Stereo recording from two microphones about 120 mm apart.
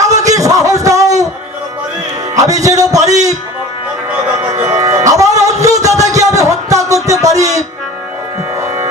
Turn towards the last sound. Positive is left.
turn(degrees=-30)  # may be behind; listen again after turning